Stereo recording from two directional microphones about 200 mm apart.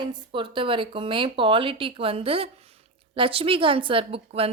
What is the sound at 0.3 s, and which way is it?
Speech, 25° right (ahead or behind).